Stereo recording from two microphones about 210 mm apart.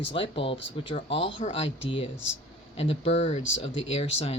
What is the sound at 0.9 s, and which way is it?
Speech, 35° left (ahead or behind).